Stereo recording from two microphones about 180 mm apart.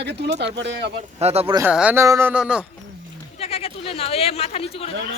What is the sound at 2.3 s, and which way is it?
Speech, 5° right (ahead or behind).